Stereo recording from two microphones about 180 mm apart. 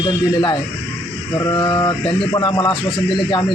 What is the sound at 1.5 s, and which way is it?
Speech, 25° left (ahead or behind).